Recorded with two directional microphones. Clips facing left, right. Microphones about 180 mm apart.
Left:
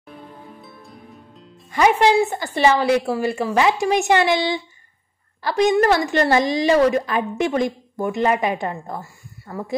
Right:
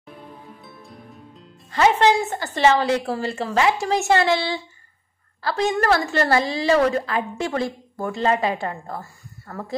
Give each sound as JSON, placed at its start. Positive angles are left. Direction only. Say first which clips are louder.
{"t": 0.6, "sound": "music", "louder": "left 1 dB", "side_deg": 0}
{"t": 1.7, "sound": "a woman's voice", "louder": "left 1 dB", "side_deg": 15}